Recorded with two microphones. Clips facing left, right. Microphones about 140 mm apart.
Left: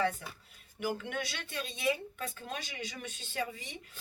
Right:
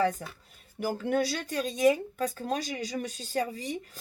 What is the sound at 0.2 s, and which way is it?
Speech, 40° right (ahead or behind).